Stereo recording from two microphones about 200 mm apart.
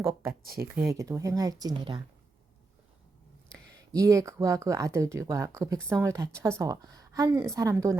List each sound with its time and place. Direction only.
0.0 s speech: 15° right (ahead or behind)
0.4 s speech: 50° right (ahead or behind)
0.9 s speech: 15° right (ahead or behind)
3.9 s speech: 15° right (ahead or behind)